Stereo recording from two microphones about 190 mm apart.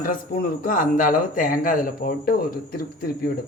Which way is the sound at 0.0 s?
50° left (ahead or behind).